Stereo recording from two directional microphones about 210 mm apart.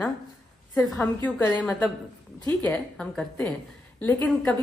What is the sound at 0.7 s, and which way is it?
A woman's voice, 10° left (ahead or behind).